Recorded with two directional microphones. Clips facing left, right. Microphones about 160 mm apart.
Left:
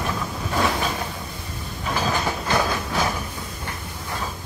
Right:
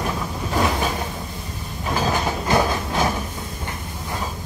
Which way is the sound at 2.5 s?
20° right (ahead or behind).